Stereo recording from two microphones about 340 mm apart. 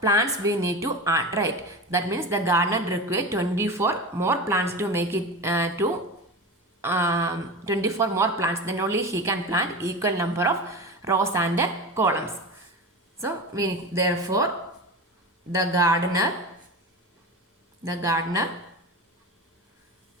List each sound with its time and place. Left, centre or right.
0.0 s a woman's voice: centre
15.5 s a woman's voice: centre
17.8 s a woman's voice: centre